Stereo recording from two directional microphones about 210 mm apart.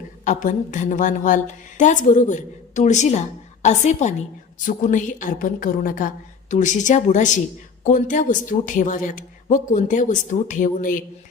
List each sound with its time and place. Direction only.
0.3 s speech: 40° left (ahead or behind)